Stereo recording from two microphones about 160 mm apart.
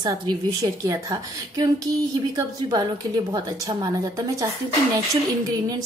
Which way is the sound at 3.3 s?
20° right (ahead or behind).